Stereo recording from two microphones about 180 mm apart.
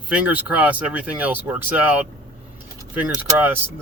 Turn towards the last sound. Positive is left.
turn(degrees=-10)  # may be behind; listen again after turning